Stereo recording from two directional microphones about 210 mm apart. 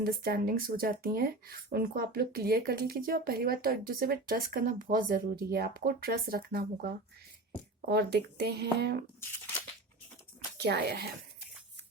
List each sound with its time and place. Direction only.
0.0 s speech: 45° right (ahead or behind)
10.6 s speech: 50° right (ahead or behind)